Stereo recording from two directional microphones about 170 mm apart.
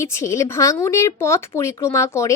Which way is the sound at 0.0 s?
15° left (ahead or behind).